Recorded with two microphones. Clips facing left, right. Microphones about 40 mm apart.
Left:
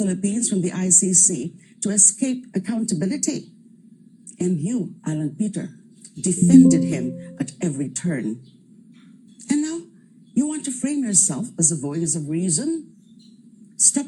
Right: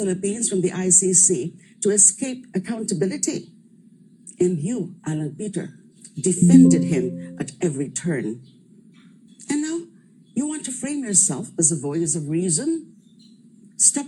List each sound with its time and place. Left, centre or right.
0.0 s speech: right
9.5 s a sound: right
10.3 s a woman's voice: right